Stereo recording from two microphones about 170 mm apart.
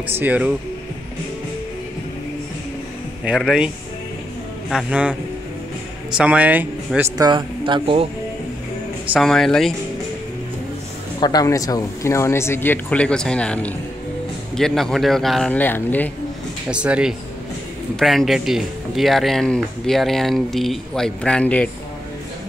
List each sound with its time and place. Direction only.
0.2 s speech: 10° right (ahead or behind)
3.3 s speech: 5° right (ahead or behind)
6.1 s speech: 10° right (ahead or behind); by 8.1 s 30° right (ahead or behind)
9.1 s speech: centre (ahead or behind)
11.1 s speech: 25° left (ahead or behind)
16.7 s speech: 5° right (ahead or behind)